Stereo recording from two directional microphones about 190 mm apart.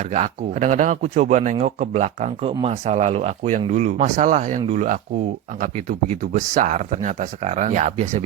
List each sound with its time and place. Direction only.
0.0 s speech: 35° right (ahead or behind)